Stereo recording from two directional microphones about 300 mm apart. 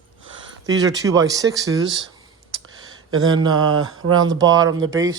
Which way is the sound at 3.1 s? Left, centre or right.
Right.